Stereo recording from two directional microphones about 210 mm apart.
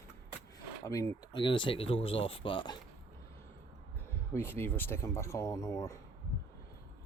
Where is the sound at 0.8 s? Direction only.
15° left (ahead or behind).